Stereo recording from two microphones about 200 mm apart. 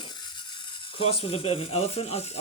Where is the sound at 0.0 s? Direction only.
20° left (ahead or behind).